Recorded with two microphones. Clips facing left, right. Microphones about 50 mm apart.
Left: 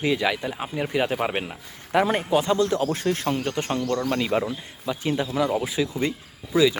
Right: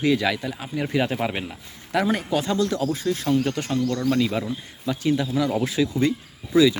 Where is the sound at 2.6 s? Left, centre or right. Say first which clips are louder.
Left 1 dB; left.